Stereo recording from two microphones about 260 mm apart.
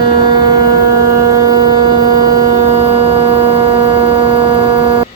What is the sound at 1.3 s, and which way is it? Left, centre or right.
Hum, centre.